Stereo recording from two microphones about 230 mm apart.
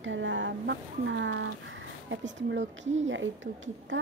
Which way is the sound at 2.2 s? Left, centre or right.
Right.